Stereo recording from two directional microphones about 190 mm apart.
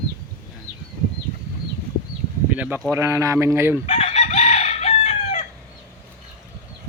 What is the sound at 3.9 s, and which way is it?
Chicken, 35° left (ahead or behind).